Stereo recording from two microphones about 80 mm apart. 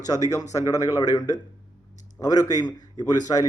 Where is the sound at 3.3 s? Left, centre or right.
Left.